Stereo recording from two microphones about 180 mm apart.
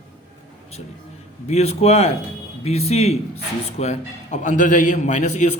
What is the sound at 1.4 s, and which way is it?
A man's voice, 35° left (ahead or behind).